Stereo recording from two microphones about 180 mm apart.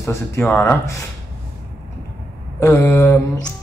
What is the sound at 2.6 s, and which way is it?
Speech, 10° left (ahead or behind).